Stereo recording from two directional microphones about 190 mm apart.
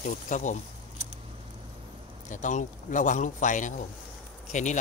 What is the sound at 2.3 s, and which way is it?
A man's voice, 40° left (ahead or behind).